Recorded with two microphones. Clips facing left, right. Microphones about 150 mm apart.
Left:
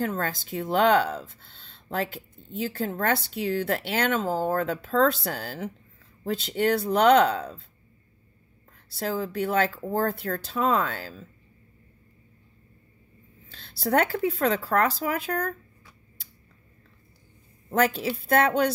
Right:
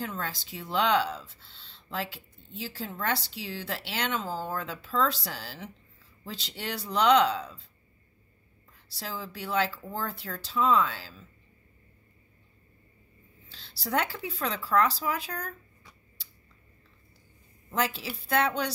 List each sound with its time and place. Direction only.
0.0 s speech: 50° left (ahead or behind)
8.7 s speech: 50° left (ahead or behind)
13.5 s speech: 50° left (ahead or behind)
17.6 s speech: 50° left (ahead or behind)